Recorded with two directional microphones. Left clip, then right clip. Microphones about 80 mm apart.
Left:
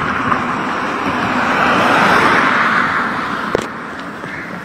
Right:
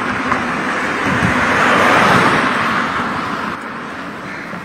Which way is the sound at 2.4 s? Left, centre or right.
Centre.